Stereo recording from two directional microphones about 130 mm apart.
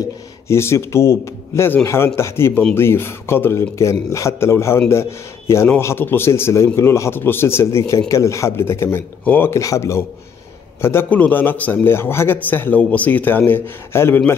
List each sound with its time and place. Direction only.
0.5 s a man's voice: 20° left (ahead or behind)